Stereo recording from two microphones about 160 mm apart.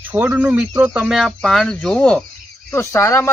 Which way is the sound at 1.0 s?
Centre (ahead or behind).